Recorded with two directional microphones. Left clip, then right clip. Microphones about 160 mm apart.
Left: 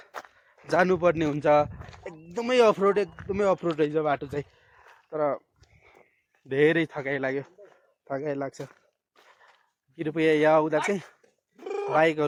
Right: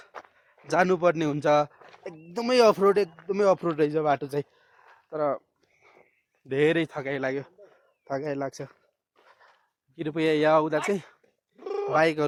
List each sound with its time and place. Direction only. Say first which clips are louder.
0.3 s speech: even; 5° right (ahead or behind)
2.3 s speech: right 1 dB; 30° right (ahead or behind)
5.0 s speech: even; 5° right (ahead or behind)
6.5 s a man's voice: left 1 dB; 10° right (ahead or behind)
9.9 s a man's voice: left 2 dB; 15° right (ahead or behind)
11.6 s cat: even; 15° right (ahead or behind)